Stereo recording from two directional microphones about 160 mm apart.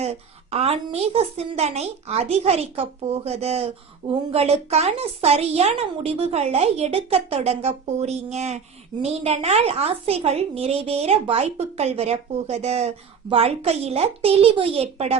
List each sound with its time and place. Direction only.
0.0 s a woman's voice: 40° right (ahead or behind)